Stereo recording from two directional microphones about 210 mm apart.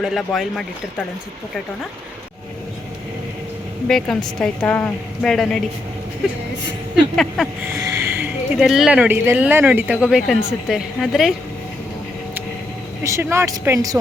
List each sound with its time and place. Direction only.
0.0 s a woman's voice: centre (ahead or behind)
3.8 s a woman's voice: centre (ahead or behind)
7.7 s speech: 15° right (ahead or behind)
13.0 s speech: 15° right (ahead or behind)